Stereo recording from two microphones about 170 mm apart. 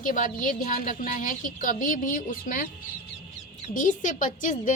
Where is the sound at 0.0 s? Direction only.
50° left (ahead or behind).